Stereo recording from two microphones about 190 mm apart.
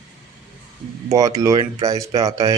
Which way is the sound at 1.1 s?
20° right (ahead or behind).